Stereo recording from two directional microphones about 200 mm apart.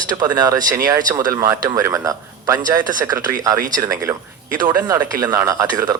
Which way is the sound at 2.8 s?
40° right (ahead or behind).